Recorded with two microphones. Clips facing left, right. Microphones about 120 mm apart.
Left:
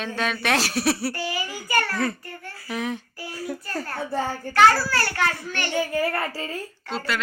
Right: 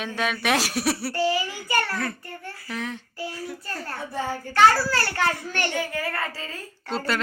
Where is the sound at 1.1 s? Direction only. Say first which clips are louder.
Right 5 dB; 25° right (ahead or behind).